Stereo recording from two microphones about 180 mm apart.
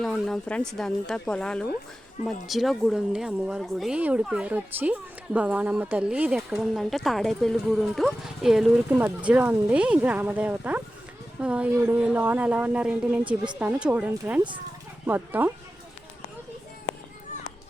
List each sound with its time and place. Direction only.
0.0 s a woman's voice: centre (ahead or behind)
13.2 s speech: 25° right (ahead or behind)
13.6 s a woman's voice: 5° right (ahead or behind)